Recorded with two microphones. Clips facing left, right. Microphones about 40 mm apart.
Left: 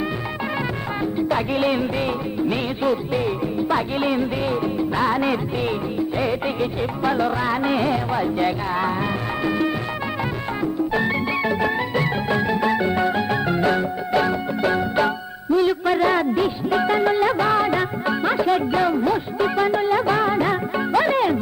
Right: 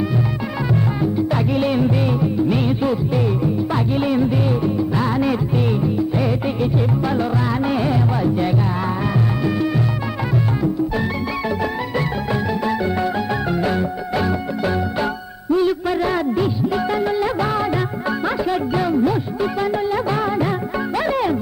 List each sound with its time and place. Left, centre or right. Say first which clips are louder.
1.5 s music: right 2 dB; centre
11.9 s music: even; centre
19.4 s music of bollywood: left 3 dB; centre
21.0 s music: right 1 dB; centre